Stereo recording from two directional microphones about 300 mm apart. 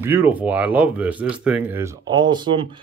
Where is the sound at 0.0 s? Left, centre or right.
Centre.